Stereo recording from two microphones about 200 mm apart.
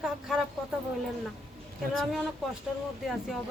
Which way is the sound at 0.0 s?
5° right (ahead or behind).